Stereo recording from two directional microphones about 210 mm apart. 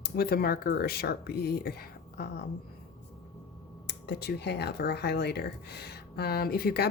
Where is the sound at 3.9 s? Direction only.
50° left (ahead or behind).